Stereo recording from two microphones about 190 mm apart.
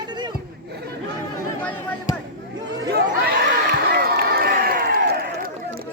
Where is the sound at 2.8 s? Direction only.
60° right (ahead or behind).